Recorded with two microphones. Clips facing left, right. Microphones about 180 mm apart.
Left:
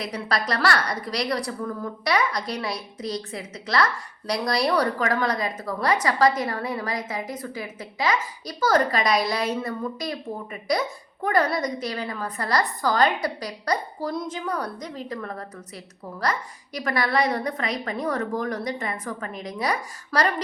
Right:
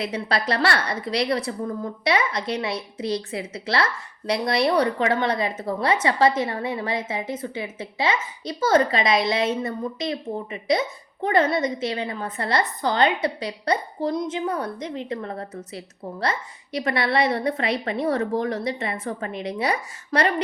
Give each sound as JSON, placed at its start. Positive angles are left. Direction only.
{"t": 0.0, "sound": "a woman's voice", "side_deg": -25}